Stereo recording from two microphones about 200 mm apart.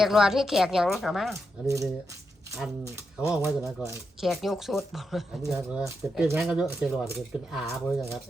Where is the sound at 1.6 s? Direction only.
15° right (ahead or behind).